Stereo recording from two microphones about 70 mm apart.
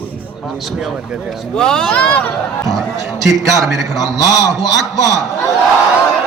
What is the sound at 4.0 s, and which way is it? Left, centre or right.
Speech, left.